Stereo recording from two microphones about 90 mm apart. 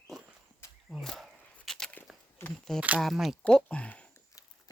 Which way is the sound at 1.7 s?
5° left (ahead or behind).